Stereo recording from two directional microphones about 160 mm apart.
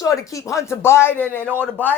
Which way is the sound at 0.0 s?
20° left (ahead or behind).